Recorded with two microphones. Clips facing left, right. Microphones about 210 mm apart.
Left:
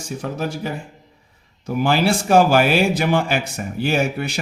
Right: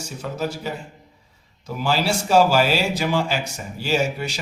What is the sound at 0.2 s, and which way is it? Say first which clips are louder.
Speech: left 1 dB; 55° left (ahead or behind).